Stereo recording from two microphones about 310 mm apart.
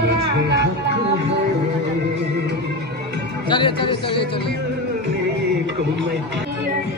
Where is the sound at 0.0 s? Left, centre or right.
Right.